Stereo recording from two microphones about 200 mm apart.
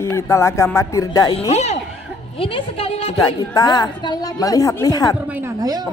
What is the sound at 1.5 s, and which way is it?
A woman's voice, 35° left (ahead or behind).